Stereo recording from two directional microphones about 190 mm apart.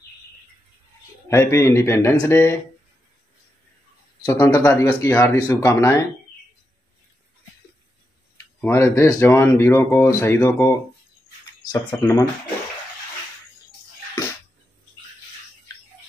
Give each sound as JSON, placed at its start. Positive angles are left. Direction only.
{"t": 1.3, "sound": "speech", "side_deg": 15}
{"t": 4.3, "sound": "speech", "side_deg": 10}
{"t": 8.4, "sound": "speech", "side_deg": 15}
{"t": 11.9, "sound": "speech", "side_deg": 15}